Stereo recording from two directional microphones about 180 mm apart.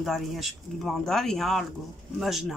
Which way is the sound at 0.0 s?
Centre (ahead or behind).